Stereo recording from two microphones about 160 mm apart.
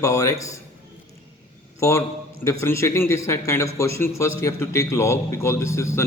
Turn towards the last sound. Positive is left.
turn(degrees=15)  # may be behind; listen again after turning